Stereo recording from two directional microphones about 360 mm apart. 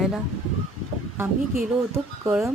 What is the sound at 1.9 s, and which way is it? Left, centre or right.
Speech, centre.